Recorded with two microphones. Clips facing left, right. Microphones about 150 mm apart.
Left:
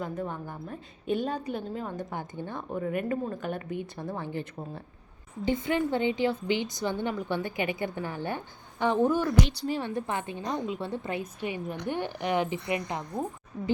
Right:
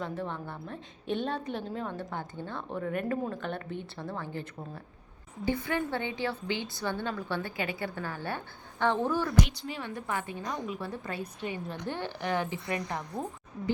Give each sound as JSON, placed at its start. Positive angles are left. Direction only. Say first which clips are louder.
{"t": 0.0, "sound": "a woman's voice", "louder": "left 2 dB", "side_deg": 10}
{"t": 2.1, "sound": "a woman's voice", "louder": "left 2 dB", "side_deg": 15}
{"t": 9.5, "sound": "a woman's voice", "louder": "left 7 dB", "side_deg": 35}